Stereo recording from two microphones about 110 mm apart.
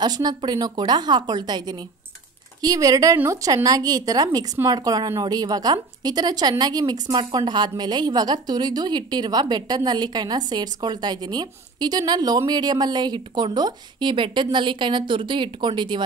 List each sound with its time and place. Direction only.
0.0 s a woman's voice: 40° right (ahead or behind)